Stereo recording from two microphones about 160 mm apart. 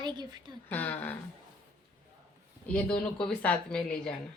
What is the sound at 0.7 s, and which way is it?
Speech, 10° left (ahead or behind).